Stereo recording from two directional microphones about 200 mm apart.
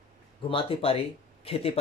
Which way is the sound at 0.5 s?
30° left (ahead or behind).